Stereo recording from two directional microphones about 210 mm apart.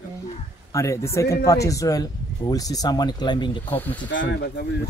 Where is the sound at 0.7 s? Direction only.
15° left (ahead or behind).